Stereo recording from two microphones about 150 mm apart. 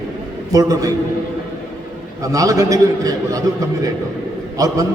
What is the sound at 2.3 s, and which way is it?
A man's voice, 20° right (ahead or behind).